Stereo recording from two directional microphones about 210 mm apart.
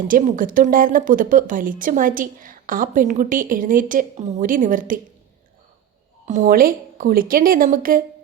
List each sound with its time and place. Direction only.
0.1 s a woman's voice: 40° right (ahead or behind)
6.2 s a woman's voice: 35° right (ahead or behind)